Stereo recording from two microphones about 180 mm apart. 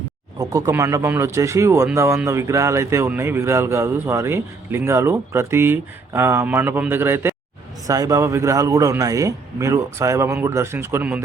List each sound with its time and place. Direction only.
0.3 s speech: 15° right (ahead or behind)